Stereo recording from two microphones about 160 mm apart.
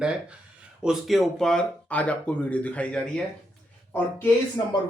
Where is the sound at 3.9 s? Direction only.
15° left (ahead or behind).